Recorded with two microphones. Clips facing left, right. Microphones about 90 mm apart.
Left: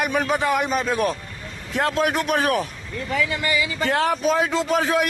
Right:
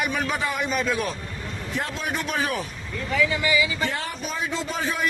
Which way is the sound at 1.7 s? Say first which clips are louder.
Left 8 dB; 90° left.